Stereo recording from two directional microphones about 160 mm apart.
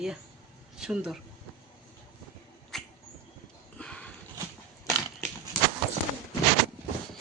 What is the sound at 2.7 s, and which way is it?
Rodents, centre (ahead or behind).